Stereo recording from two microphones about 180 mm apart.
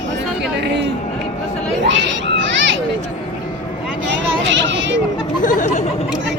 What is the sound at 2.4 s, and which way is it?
Children playing, 90° right.